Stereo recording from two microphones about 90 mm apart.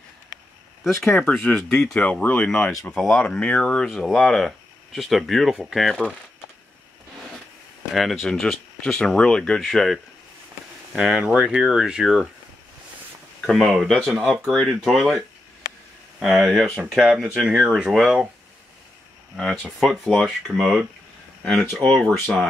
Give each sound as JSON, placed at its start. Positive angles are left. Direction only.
{"t": 0.9, "sound": "speech", "side_deg": 25}
{"t": 7.9, "sound": "speech", "side_deg": 0}
{"t": 11.0, "sound": "speech", "side_deg": -5}
{"t": 13.5, "sound": "speech", "side_deg": 0}
{"t": 19.3, "sound": "speech", "side_deg": 5}
{"t": 21.8, "sound": "speech", "side_deg": 10}